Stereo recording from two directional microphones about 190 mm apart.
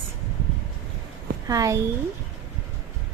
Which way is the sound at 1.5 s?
15° right (ahead or behind).